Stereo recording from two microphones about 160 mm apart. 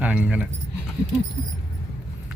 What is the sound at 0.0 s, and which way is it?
Speech, 10° right (ahead or behind).